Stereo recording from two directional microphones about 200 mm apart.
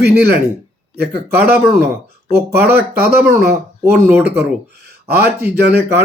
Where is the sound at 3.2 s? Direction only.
10° right (ahead or behind).